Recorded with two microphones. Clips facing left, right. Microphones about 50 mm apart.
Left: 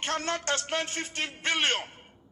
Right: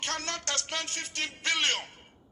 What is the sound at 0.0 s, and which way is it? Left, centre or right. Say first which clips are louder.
A man's voice: left 4 dB; left.